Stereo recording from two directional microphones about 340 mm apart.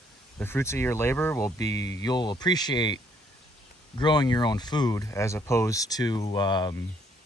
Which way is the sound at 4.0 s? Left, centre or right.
Centre.